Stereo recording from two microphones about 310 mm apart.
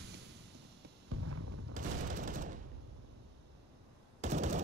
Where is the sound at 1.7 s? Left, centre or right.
Right.